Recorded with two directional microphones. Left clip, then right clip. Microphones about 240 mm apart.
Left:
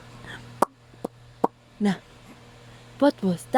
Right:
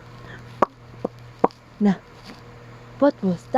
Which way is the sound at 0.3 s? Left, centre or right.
Left.